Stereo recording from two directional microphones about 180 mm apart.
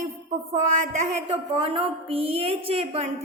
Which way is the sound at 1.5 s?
30° right (ahead or behind).